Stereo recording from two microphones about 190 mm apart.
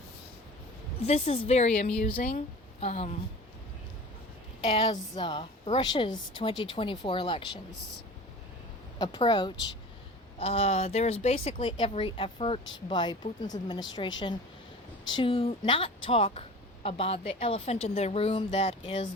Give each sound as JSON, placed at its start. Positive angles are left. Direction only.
{"t": 1.0, "sound": "a woman's voice", "side_deg": 35}
{"t": 2.0, "sound": "speech", "side_deg": 50}
{"t": 2.8, "sound": "a woman's voice", "side_deg": 35}
{"t": 4.7, "sound": "a woman's voice", "side_deg": 25}
{"t": 9.0, "sound": "a woman's voice", "side_deg": 25}
{"t": 15.1, "sound": "a woman's voice", "side_deg": 30}